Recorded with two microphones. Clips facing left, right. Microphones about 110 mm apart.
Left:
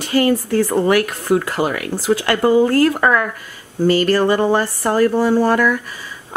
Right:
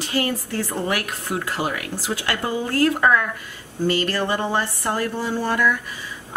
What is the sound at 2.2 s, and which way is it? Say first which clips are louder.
Speech: left 12 dB; 60° left (ahead or behind).